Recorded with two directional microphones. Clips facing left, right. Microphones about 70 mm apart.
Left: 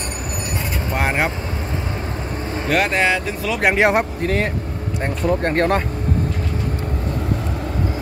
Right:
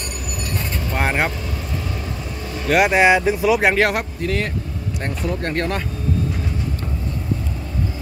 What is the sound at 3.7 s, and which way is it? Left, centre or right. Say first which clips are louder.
Speech: left 3 dB; left.